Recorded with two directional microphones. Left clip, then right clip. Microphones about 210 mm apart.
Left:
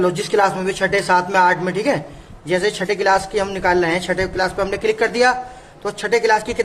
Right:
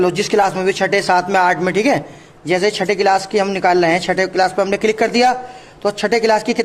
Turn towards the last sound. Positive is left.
turn(degrees=-40)  # may be behind; listen again after turning